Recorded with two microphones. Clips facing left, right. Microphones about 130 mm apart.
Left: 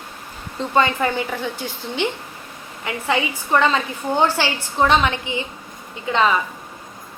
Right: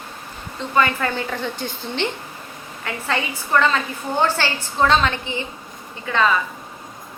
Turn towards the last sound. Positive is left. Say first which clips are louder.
# left 1 dB
turn(degrees=20)  # may be behind; listen again after turning